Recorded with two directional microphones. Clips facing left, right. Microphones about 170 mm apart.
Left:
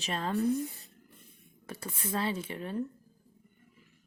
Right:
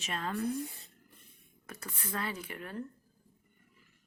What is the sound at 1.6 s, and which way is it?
Speech, 30° left (ahead or behind).